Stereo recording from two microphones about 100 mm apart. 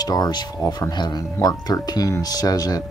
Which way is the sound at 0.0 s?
40° left (ahead or behind).